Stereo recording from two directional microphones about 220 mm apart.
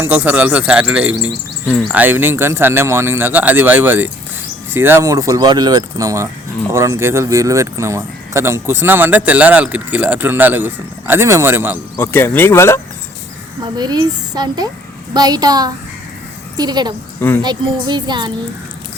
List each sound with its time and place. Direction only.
0.0 s speech: 5° right (ahead or behind)
11.9 s speech: 10° left (ahead or behind)
13.7 s speech: 20° right (ahead or behind)
17.2 s speech: 10° left (ahead or behind)
17.4 s speech: 20° right (ahead or behind)